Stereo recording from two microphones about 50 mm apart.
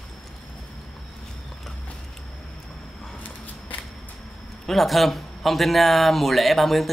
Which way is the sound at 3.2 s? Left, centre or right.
Left.